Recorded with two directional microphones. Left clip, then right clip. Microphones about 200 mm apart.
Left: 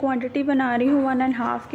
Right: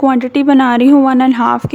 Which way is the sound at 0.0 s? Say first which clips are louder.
Right 11 dB; 35° right (ahead or behind).